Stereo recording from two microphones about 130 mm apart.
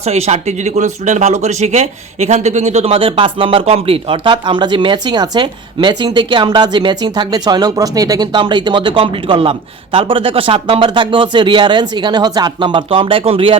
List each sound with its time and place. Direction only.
0.0 s speech: 55° right (ahead or behind)